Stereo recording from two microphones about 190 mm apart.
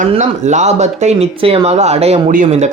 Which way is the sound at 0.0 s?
40° right (ahead or behind).